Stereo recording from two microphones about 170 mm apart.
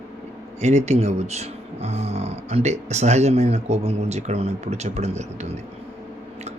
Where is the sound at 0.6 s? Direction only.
40° right (ahead or behind).